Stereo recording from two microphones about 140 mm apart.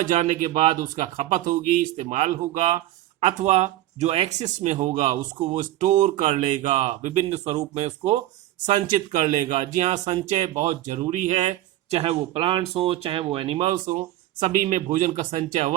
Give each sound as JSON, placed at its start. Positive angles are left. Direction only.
{"t": 0.0, "sound": "speech", "side_deg": -55}
{"t": 8.6, "sound": "speech", "side_deg": -60}
{"t": 13.7, "sound": "speech", "side_deg": -65}